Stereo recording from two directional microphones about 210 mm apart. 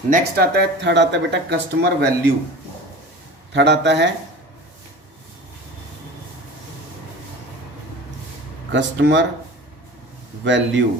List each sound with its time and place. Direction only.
0.1 s speech: 50° right (ahead or behind)
3.5 s speech: 55° right (ahead or behind)
8.7 s speech: 60° right (ahead or behind)
10.4 s speech: 60° right (ahead or behind)